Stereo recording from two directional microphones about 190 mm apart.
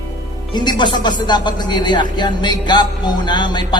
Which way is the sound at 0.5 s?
25° left (ahead or behind).